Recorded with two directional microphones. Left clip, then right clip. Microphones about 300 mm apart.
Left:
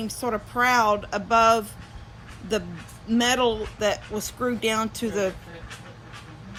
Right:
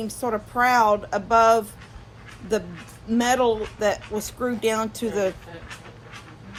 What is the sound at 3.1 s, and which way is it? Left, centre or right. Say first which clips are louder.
Speech: right 1 dB; centre.